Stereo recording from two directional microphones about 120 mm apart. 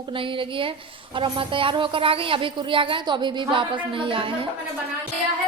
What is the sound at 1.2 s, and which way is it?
A woman's voice, 45° right (ahead or behind).